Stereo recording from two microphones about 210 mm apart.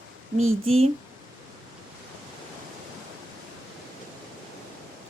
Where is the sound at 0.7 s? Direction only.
30° right (ahead or behind).